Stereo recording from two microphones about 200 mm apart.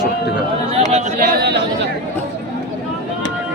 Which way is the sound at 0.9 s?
45° right (ahead or behind).